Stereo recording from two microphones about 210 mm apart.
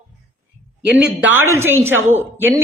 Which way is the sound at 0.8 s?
55° right (ahead or behind).